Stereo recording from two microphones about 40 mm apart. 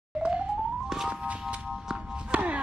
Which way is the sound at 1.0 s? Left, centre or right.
Right.